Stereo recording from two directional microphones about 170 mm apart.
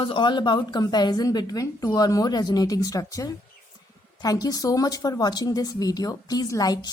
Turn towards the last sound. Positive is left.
turn(degrees=25)  # may be behind; listen again after turning